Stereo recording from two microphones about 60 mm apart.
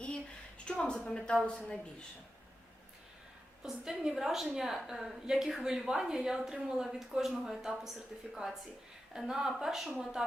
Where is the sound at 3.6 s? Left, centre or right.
Centre.